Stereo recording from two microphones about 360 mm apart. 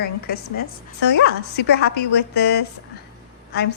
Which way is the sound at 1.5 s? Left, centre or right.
Left.